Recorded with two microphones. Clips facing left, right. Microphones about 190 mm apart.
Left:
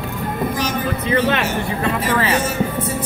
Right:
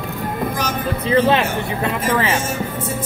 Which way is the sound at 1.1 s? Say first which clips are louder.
Right 3 dB; 30° right (ahead or behind).